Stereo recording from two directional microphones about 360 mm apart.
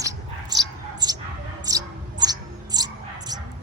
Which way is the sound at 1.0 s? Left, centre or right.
Centre.